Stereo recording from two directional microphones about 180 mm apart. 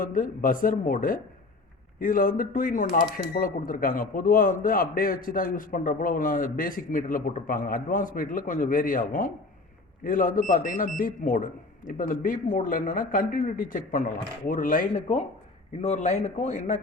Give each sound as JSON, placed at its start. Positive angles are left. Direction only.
{"t": 0.0, "sound": "speech", "side_deg": 50}